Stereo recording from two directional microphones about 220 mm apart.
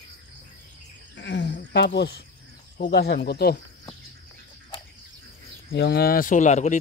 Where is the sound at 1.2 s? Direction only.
55° left (ahead or behind).